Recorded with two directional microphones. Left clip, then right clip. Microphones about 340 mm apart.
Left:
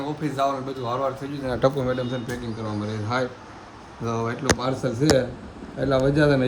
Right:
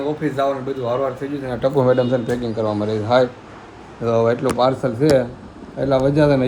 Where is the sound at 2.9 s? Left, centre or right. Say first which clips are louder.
Right 10 dB; centre.